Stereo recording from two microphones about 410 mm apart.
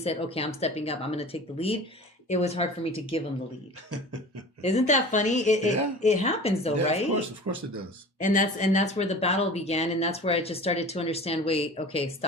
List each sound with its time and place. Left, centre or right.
0.0 s speech: centre
4.6 s speech: centre
7.5 s speech: right
8.2 s speech: centre